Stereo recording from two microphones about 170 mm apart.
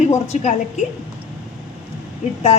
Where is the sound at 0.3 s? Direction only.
45° left (ahead or behind).